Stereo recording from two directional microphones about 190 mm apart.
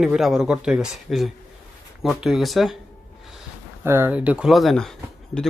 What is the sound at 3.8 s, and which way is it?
Speech, 10° right (ahead or behind).